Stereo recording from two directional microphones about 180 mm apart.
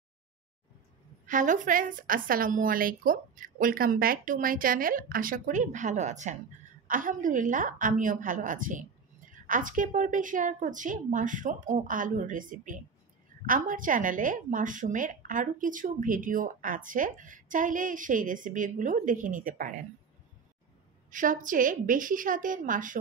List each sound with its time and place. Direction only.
1.2 s a woman's voice: 45° right (ahead or behind)
21.1 s a woman's voice: 45° right (ahead or behind)